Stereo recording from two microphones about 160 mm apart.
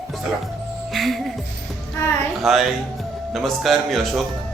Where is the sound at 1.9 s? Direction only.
15° left (ahead or behind).